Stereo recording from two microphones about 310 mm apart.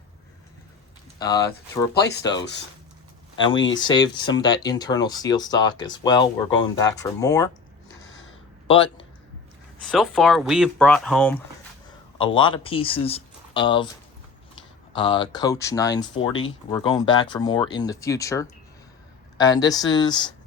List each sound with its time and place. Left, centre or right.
1.2 s speech: centre
1.9 s speech: left
3.3 s speech: centre
3.6 s speech: left
3.8 s speech: centre
8.6 s speech: centre
9.8 s speech: centre
12.1 s speech: centre
14.9 s speech: centre